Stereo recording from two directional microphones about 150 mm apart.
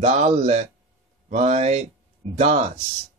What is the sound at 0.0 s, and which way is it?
Speech, 50° right (ahead or behind).